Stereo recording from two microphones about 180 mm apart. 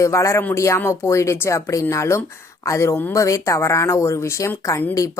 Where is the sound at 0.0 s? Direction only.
15° left (ahead or behind).